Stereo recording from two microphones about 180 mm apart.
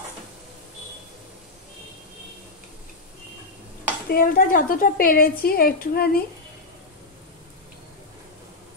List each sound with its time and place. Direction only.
4.1 s a woman's voice: 55° left (ahead or behind)